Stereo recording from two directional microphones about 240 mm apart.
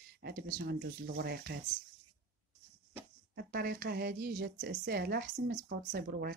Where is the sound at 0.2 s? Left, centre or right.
Right.